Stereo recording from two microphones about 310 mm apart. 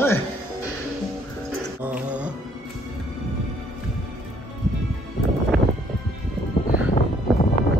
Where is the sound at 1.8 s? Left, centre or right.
Centre.